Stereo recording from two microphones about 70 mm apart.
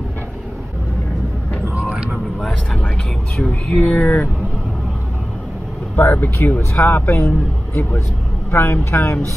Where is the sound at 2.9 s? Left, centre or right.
Centre.